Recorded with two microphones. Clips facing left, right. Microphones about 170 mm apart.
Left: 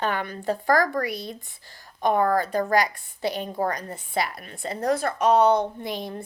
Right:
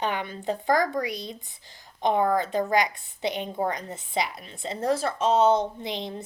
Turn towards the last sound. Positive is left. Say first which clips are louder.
# left 1 dB
turn(degrees=-20)  # may be behind; listen again after turning